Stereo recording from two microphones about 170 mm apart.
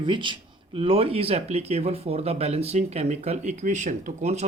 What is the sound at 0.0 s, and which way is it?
Speech, 30° right (ahead or behind).